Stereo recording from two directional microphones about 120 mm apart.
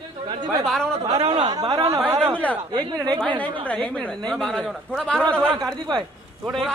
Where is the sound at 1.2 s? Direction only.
40° right (ahead or behind).